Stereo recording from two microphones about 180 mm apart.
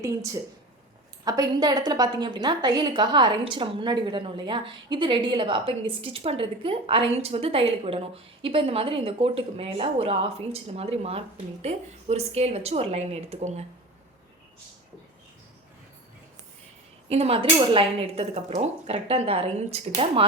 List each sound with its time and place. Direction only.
1.2 s a woman's voice: 20° right (ahead or behind); by 13.7 s 35° right (ahead or behind)
17.1 s speech: 35° right (ahead or behind)